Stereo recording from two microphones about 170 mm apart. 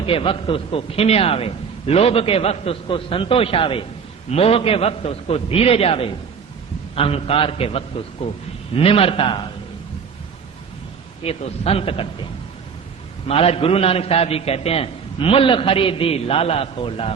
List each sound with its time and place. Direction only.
0.0 s a man's voice: 30° left (ahead or behind)
11.2 s a man's voice: 35° left (ahead or behind)
13.2 s a man's voice: 35° left (ahead or behind)